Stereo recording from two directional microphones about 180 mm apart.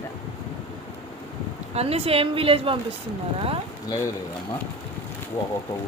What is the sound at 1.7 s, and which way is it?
A woman's voice, 35° right (ahead or behind).